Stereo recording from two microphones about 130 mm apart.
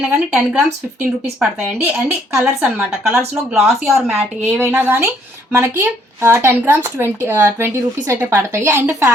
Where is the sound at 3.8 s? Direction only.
Centre (ahead or behind).